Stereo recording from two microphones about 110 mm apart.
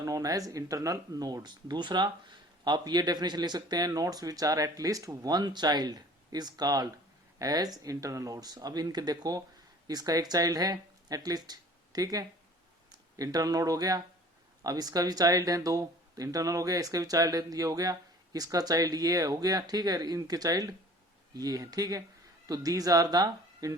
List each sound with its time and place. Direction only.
0.0 s speech: 30° right (ahead or behind)